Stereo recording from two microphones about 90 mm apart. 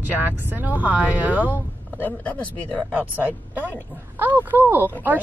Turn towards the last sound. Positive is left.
turn(degrees=-20)  # may be behind; listen again after turning